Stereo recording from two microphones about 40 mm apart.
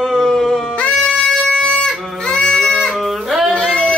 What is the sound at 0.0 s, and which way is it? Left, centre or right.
Baby cry, centre.